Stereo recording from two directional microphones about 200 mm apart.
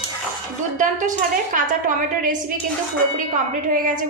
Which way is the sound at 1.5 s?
40° right (ahead or behind).